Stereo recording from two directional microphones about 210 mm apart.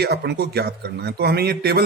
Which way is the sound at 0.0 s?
50° right (ahead or behind).